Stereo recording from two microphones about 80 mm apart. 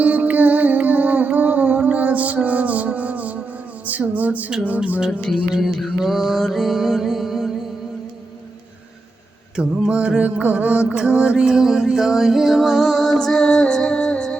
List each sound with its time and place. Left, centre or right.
0.0 s music: centre
9.6 s music: centre